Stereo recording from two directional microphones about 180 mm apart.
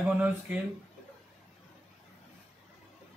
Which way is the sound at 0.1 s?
10° right (ahead or behind).